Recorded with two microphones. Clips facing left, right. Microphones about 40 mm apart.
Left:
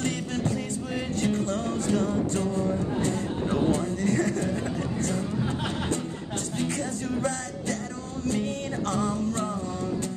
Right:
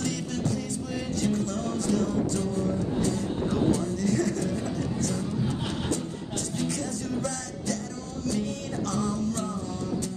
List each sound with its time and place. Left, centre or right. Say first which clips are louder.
0.0 s music: left 1 dB; left
8.3 s music: left 2 dB; left